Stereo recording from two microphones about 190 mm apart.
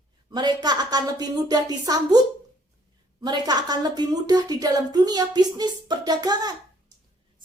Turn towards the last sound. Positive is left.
turn(degrees=-20)  # may be behind; listen again after turning